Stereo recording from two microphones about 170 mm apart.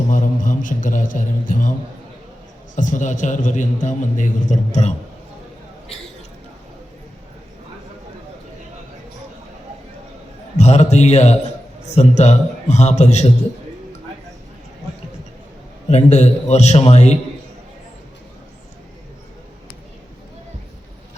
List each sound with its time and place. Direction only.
0.1 s a man's voice: 50° left (ahead or behind)
2.7 s a man's voice: 50° left (ahead or behind)
10.6 s a man's voice: 40° left (ahead or behind)
15.9 s a man's voice: 40° left (ahead or behind)